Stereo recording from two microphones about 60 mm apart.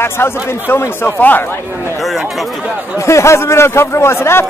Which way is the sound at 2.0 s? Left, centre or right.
Centre.